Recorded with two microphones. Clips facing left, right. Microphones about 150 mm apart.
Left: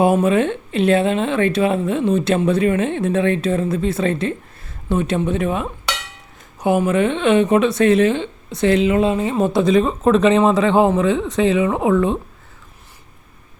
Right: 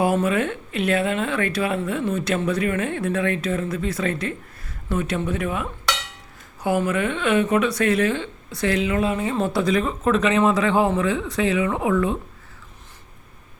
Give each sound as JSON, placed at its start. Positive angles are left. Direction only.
{"t": 0.0, "sound": "speech", "side_deg": 25}